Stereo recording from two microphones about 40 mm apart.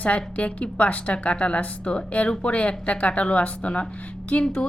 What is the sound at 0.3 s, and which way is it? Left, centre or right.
A woman's voice, left.